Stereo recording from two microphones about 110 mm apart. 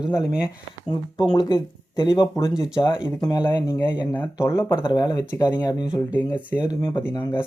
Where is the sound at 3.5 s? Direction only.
20° left (ahead or behind).